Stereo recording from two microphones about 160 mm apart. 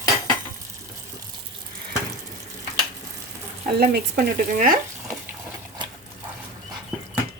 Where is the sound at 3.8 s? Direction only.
80° right; by 4.7 s 60° right (ahead or behind).